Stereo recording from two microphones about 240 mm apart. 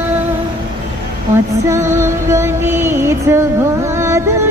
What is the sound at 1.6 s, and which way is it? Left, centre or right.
Music, centre.